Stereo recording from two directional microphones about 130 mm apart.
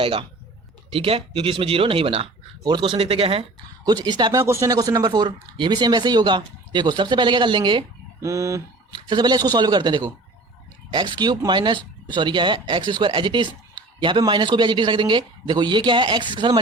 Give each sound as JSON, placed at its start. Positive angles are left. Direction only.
{"t": 0.0, "sound": "speech", "side_deg": -40}
{"t": 3.8, "sound": "speech", "side_deg": -30}
{"t": 8.2, "sound": "speech", "side_deg": -25}